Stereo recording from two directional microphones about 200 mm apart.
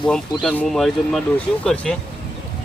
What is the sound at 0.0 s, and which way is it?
Speech, 5° left (ahead or behind).